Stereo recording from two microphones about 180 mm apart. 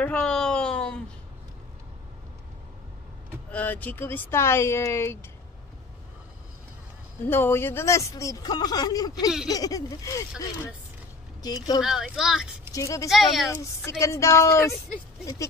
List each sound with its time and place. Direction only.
0.0 s a sound: 5° left (ahead or behind)
3.5 s speech: 10° left (ahead or behind)
7.2 s speech: 10° left (ahead or behind)
11.4 s speech: 20° left (ahead or behind)
11.8 s speech: centre (ahead or behind)
12.7 s speech: 15° left (ahead or behind)
13.1 s speech: centre (ahead or behind)
13.8 s speech: 15° left (ahead or behind)